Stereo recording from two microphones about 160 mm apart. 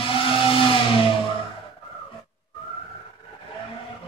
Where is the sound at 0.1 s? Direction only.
35° left (ahead or behind).